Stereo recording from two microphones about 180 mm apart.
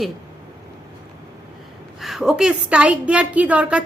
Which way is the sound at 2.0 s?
Centre (ahead or behind).